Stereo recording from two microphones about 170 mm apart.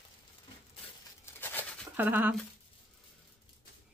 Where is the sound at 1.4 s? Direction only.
10° left (ahead or behind).